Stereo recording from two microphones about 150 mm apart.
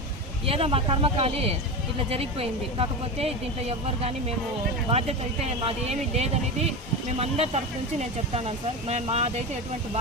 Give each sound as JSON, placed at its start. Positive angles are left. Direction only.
{"t": 0.4, "sound": "speech", "side_deg": -40}